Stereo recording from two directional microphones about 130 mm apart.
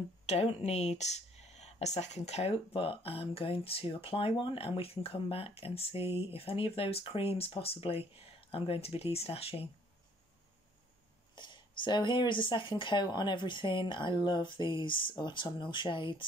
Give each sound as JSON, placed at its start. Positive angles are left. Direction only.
{"t": 0.3, "sound": "speech", "side_deg": 50}
{"t": 11.3, "sound": "speech", "side_deg": 35}